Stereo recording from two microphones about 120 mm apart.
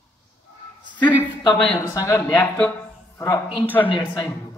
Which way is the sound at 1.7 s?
25° left (ahead or behind).